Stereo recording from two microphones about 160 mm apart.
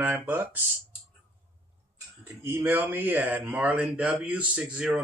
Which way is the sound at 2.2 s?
15° right (ahead or behind).